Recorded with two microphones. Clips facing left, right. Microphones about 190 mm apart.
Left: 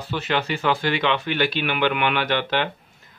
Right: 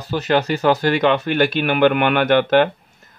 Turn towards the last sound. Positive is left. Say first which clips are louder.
# right 9 dB
turn(degrees=-50)  # may be behind; listen again after turning